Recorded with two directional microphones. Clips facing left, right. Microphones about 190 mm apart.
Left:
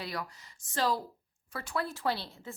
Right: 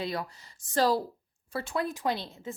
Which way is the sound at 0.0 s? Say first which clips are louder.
Right 5 dB; 25° right (ahead or behind).